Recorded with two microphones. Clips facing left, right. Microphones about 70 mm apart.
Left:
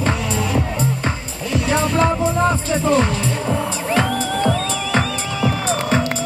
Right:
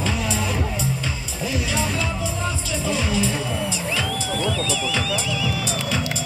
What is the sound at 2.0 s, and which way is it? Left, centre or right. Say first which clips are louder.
Music: left 10 dB; left.